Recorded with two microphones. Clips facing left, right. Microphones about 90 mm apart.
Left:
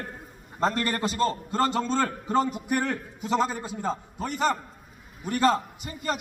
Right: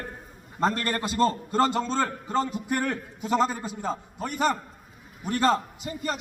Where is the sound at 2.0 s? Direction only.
10° left (ahead or behind).